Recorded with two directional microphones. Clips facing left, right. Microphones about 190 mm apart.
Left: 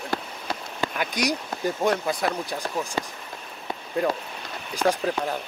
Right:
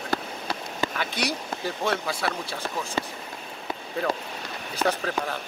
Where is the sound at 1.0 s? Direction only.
10° left (ahead or behind).